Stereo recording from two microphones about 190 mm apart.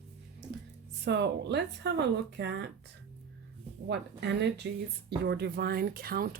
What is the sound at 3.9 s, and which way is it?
Speech, 65° right (ahead or behind).